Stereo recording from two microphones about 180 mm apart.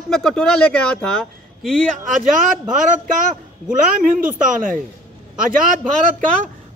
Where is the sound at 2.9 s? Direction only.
45° right (ahead or behind).